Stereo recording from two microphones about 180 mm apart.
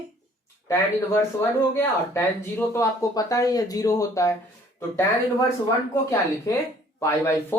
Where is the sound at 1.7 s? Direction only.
15° left (ahead or behind).